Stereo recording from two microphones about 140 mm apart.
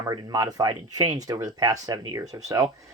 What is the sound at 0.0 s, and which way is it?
Speech, 30° right (ahead or behind).